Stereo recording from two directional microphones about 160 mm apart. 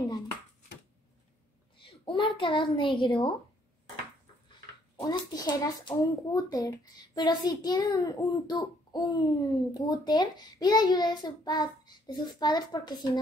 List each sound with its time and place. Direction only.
1.8 s a sound: 30° left (ahead or behind)
3.0 s a woman's voice: 35° left (ahead or behind)
4.9 s a child's voice: 25° left (ahead or behind)